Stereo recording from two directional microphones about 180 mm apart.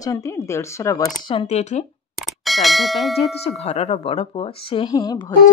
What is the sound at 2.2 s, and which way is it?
Speech, centre (ahead or behind).